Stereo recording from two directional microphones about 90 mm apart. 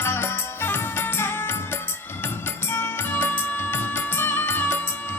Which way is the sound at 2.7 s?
25° left (ahead or behind).